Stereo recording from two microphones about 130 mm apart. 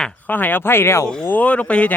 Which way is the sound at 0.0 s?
10° left (ahead or behind).